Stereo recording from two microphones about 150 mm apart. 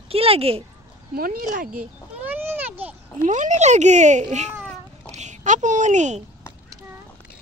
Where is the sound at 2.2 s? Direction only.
15° right (ahead or behind).